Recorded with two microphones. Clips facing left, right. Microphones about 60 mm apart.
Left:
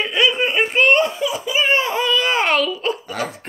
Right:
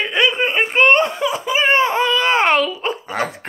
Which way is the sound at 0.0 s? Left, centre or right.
Right.